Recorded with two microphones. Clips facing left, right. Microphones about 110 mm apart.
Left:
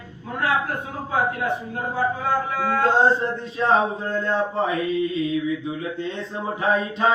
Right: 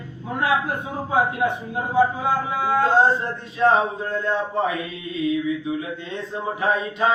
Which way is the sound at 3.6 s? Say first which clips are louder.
Right 2 dB; 30° left (ahead or behind).